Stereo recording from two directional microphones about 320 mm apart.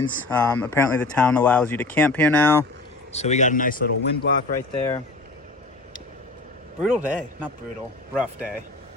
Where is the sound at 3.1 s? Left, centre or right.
Left.